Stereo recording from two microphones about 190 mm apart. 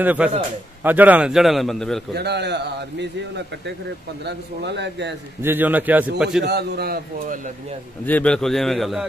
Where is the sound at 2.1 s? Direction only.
60° right (ahead or behind).